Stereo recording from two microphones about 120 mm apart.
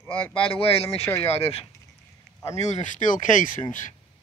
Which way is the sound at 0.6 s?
55° left (ahead or behind).